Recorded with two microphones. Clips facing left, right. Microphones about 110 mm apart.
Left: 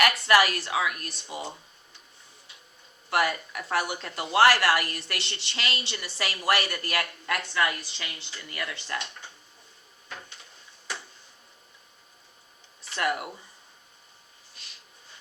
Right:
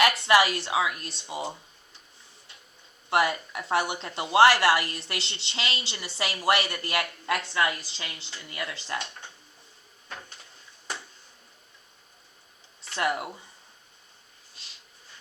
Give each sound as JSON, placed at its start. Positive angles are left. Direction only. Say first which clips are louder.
{"t": 0.0, "sound": "speech", "louder": "right 1 dB", "side_deg": -25}
{"t": 3.1, "sound": "speech", "louder": "right 1 dB", "side_deg": -25}
{"t": 13.0, "sound": "speech", "louder": "right 1 dB", "side_deg": -25}
{"t": 14.5, "sound": "snort", "louder": "left 1 dB", "side_deg": -25}